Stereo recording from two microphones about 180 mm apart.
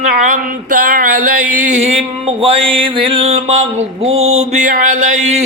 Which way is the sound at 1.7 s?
40° right (ahead or behind).